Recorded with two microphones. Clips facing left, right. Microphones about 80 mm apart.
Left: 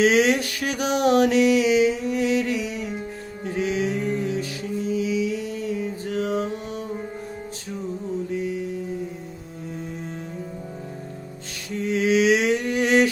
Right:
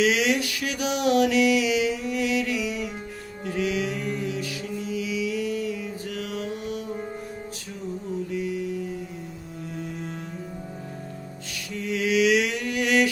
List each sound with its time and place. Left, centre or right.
0.0 s a sound: left
3.4 s mantra: left
8.3 s mantra: left
11.7 s mantra: left